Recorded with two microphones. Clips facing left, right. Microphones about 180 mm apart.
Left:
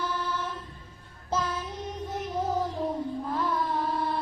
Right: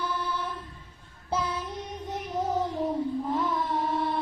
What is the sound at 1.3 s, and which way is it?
Child singing, 15° right (ahead or behind).